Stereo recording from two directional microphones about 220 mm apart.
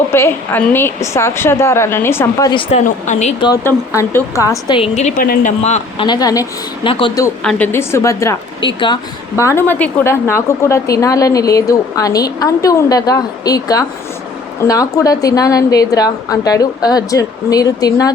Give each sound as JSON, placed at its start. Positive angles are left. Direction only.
{"t": 0.1, "sound": "a woman's voice", "side_deg": 10}
{"t": 3.4, "sound": "a woman's voice", "side_deg": 15}
{"t": 4.8, "sound": "a woman's voice", "side_deg": 30}
{"t": 6.1, "sound": "a woman's voice", "side_deg": 15}
{"t": 7.4, "sound": "a woman's voice", "side_deg": 10}